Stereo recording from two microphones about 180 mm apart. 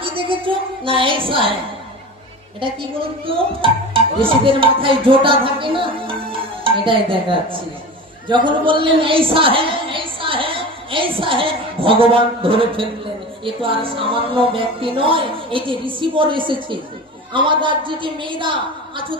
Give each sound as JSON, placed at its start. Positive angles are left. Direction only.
{"t": 0.2, "sound": "music", "side_deg": -30}
{"t": 3.2, "sound": "speech", "side_deg": -30}
{"t": 8.3, "sound": "female singing", "side_deg": -25}
{"t": 13.4, "sound": "music", "side_deg": -30}